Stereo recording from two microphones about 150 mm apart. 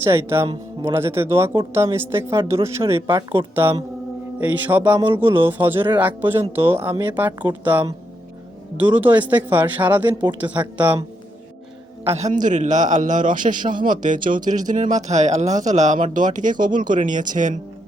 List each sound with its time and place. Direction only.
0.0 s speech: 15° right (ahead or behind)
9.0 s speech: 10° right (ahead or behind)
12.0 s speech: 45° right (ahead or behind)
12.3 s a man's voice: 55° right (ahead or behind)
13.6 s speech: 30° right (ahead or behind)
13.8 s a man's voice: 60° right (ahead or behind)